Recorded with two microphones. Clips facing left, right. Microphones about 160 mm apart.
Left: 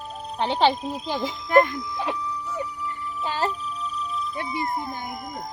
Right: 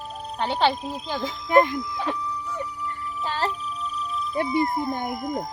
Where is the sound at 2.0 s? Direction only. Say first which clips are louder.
Even; 5° left (ahead or behind).